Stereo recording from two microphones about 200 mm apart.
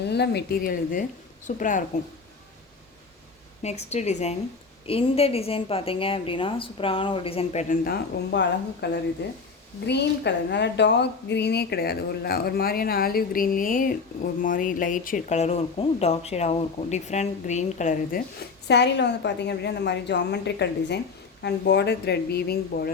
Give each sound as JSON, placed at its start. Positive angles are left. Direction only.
{"t": 0.0, "sound": "a woman's voice", "side_deg": 55}
{"t": 3.6, "sound": "a woman's voice", "side_deg": 35}
{"t": 7.9, "sound": "speech", "side_deg": 55}